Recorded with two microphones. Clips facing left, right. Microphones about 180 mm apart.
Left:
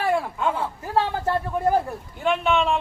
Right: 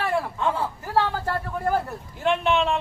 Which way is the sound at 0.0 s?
10° left (ahead or behind).